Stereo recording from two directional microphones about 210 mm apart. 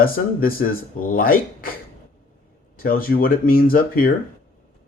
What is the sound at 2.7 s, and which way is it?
Speech, 45° left (ahead or behind).